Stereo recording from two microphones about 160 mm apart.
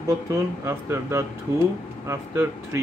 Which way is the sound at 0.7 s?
15° right (ahead or behind).